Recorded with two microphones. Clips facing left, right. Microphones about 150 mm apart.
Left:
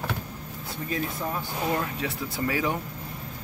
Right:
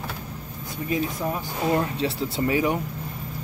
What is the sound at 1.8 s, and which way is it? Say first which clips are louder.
Speech: right 5 dB; 25° right (ahead or behind).